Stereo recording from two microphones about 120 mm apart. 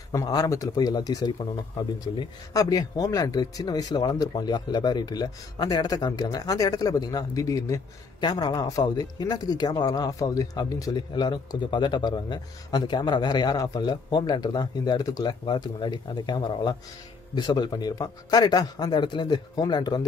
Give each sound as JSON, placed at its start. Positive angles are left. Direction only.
{"t": 0.1, "sound": "speech", "side_deg": 30}